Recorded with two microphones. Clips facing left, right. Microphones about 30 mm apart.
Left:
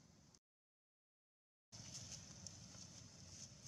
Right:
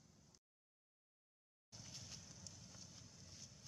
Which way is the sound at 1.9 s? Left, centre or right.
Centre.